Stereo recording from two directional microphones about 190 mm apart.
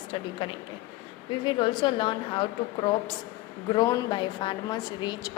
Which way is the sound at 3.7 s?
20° left (ahead or behind).